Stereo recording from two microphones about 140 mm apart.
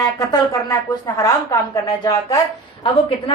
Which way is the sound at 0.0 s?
25° left (ahead or behind).